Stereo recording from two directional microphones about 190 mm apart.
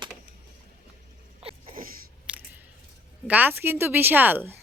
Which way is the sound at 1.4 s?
30° right (ahead or behind).